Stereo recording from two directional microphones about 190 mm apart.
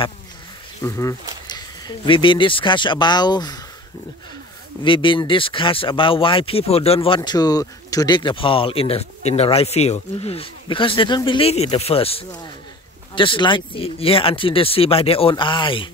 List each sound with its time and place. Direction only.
0.8 s speech: 15° left (ahead or behind)
4.8 s speech: 25° left (ahead or behind)
7.2 s speech: 20° left (ahead or behind)